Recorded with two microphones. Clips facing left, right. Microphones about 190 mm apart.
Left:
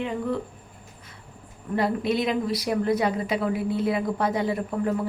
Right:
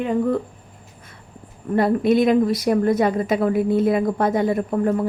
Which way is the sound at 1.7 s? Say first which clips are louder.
Right 7 dB; 50° right (ahead or behind).